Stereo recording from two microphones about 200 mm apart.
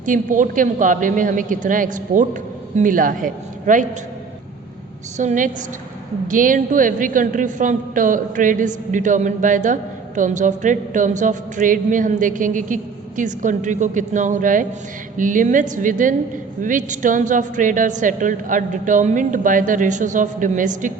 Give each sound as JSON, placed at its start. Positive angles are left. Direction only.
{"t": 0.0, "sound": "a woman's voice", "side_deg": -40}
{"t": 5.1, "sound": "a woman's voice", "side_deg": -40}